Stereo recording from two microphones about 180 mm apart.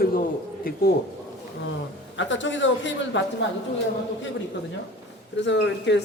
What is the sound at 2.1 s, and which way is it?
Speech, 90° left.